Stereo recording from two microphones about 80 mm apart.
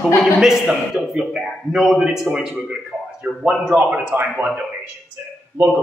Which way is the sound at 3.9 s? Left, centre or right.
Centre.